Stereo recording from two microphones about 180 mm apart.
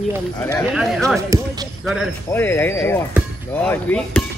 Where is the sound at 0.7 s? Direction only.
Centre (ahead or behind).